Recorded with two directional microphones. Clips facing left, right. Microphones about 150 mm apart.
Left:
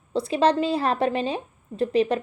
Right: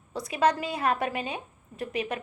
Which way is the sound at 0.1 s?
30° left (ahead or behind).